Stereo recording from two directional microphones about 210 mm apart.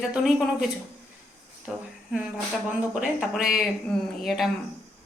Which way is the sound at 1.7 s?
Centre (ahead or behind).